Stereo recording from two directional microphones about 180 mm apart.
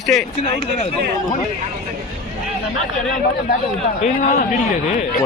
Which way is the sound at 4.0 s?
50° left (ahead or behind).